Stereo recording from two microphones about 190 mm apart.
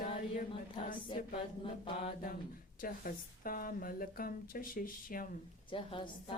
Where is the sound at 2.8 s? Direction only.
45° left (ahead or behind).